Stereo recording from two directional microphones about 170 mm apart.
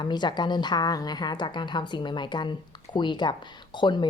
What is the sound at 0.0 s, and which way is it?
A woman's voice, 25° left (ahead or behind).